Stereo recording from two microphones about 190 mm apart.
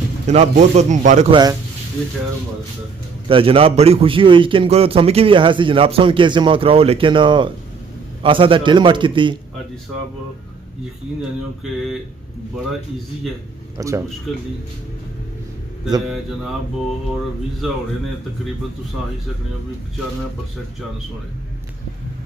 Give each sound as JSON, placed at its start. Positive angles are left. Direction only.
{"t": 0.3, "sound": "a man's voice", "side_deg": -35}
{"t": 1.3, "sound": "a man's voice", "side_deg": -20}
{"t": 3.3, "sound": "a man's voice", "side_deg": -30}
{"t": 13.7, "sound": "speech", "side_deg": -15}